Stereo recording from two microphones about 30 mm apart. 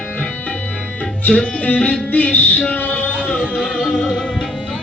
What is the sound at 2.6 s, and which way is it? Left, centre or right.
Music, left.